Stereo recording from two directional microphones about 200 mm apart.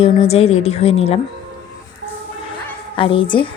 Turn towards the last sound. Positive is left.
turn(degrees=25)  # may be behind; listen again after turning